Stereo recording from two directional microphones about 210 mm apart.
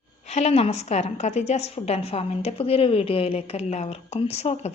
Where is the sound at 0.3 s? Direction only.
30° left (ahead or behind).